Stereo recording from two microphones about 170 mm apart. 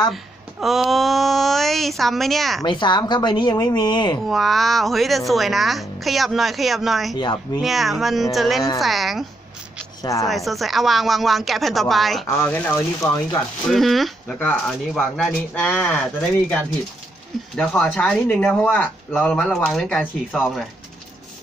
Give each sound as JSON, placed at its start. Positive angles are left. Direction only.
{"t": 0.1, "sound": "speech", "side_deg": 0}
{"t": 2.6, "sound": "speech", "side_deg": 25}
{"t": 4.3, "sound": "speech", "side_deg": 0}
{"t": 10.2, "sound": "speech", "side_deg": 0}
{"t": 12.4, "sound": "speech", "side_deg": 10}
{"t": 13.7, "sound": "speech", "side_deg": 0}